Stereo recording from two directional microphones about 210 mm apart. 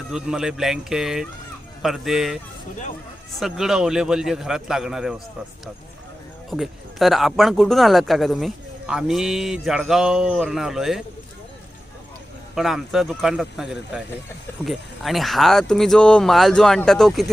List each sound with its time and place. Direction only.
0.1 s speech: centre (ahead or behind)
3.4 s speech: centre (ahead or behind)
6.5 s speech: centre (ahead or behind)
12.5 s speech: centre (ahead or behind)